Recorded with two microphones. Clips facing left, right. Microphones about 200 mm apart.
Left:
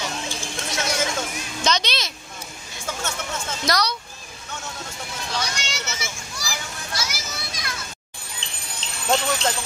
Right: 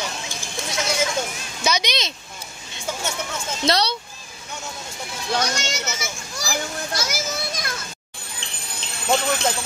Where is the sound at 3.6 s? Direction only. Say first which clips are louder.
Right 3 dB; 25° right (ahead or behind).